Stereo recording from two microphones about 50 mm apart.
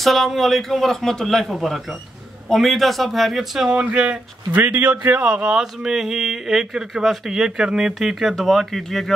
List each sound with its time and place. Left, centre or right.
0.0 s a man's voice: centre
3.6 s a man's voice: centre
5.3 s speech: centre